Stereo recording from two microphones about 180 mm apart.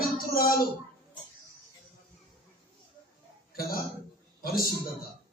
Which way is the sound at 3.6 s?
55° left (ahead or behind).